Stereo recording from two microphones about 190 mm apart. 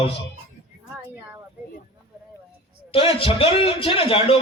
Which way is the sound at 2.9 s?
30° left (ahead or behind).